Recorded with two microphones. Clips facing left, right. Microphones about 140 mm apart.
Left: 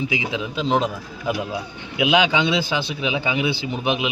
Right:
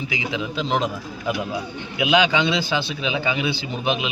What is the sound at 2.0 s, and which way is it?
A man's voice, 15° left (ahead or behind).